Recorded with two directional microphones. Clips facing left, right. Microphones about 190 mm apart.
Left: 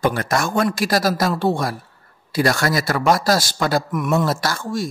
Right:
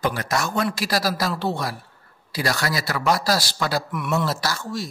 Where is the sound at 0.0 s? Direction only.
55° left (ahead or behind).